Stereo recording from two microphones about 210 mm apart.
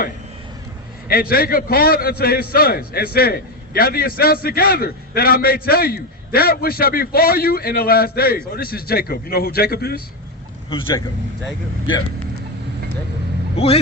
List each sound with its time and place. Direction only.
1.0 s a man's voice: 45° left (ahead or behind)
10.7 s speech: 25° left (ahead or behind)